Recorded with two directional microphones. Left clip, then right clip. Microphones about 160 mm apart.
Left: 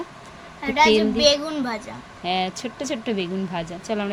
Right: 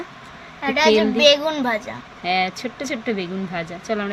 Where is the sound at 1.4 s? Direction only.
30° right (ahead or behind).